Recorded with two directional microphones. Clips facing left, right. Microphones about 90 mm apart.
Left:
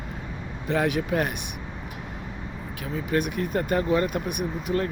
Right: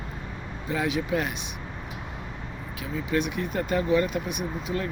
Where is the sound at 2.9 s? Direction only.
50° left (ahead or behind).